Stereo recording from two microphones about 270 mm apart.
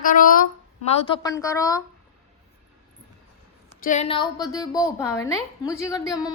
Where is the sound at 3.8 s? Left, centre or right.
Left.